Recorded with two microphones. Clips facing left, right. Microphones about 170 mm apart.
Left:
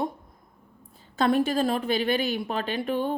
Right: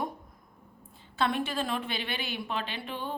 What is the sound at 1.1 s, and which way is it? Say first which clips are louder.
A woman's voice: left 7 dB; 40° left (ahead or behind).